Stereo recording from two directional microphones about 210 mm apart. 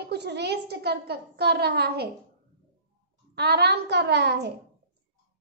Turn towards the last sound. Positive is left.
turn(degrees=-55)  # may be behind; listen again after turning